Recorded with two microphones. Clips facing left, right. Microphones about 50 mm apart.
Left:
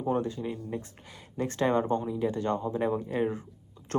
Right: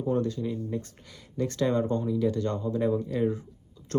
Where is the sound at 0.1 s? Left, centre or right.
Left.